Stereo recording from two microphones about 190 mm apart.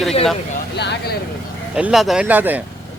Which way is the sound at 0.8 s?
65° left (ahead or behind).